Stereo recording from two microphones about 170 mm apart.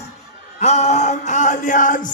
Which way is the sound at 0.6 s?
40° left (ahead or behind).